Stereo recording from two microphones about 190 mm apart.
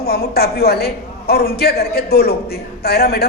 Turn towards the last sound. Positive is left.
turn(degrees=55)  # may be behind; listen again after turning